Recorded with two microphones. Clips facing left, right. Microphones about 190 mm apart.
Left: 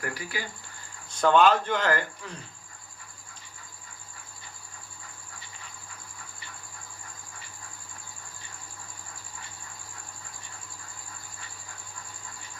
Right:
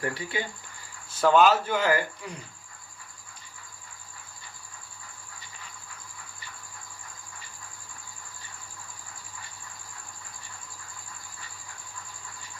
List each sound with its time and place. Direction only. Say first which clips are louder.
0.0 s speech: right 4 dB; 25° right (ahead or behind)
1.1 s speech: even; 5° right (ahead or behind)